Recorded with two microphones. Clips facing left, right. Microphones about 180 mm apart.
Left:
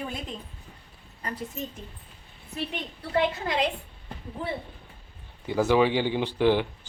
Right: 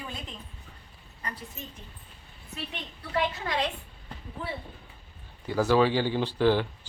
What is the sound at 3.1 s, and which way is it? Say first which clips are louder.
Speech: left 3 dB; 20° left (ahead or behind).